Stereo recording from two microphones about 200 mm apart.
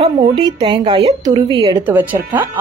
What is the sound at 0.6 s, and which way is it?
A woman's voice, 20° right (ahead or behind).